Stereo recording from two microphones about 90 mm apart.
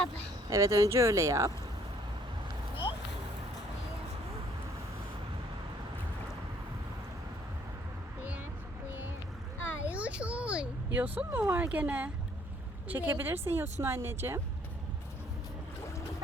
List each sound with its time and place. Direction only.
0.5 s speech: 35° right (ahead or behind)
9.8 s a sound: 15° right (ahead or behind)
12.9 s a woman's voice: 25° right (ahead or behind)